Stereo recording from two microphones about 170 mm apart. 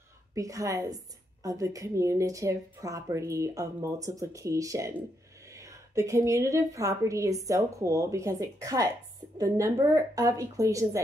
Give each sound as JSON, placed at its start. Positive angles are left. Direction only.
{"t": 0.3, "sound": "a woman's voice", "side_deg": -20}